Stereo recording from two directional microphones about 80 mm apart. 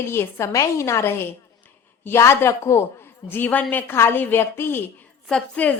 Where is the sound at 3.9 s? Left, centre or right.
Left.